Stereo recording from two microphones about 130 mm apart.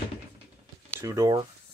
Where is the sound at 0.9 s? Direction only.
25° right (ahead or behind).